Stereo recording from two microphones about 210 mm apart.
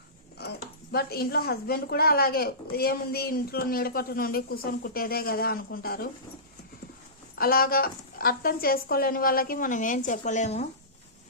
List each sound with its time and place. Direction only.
0.3 s speech: 50° left (ahead or behind)
7.3 s speech: 45° left (ahead or behind)